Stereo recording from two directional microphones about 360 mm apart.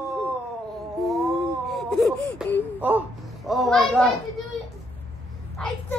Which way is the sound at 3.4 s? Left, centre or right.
Centre.